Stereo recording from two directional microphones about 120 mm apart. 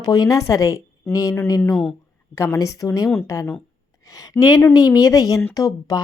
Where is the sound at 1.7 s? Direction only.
Centre (ahead or behind).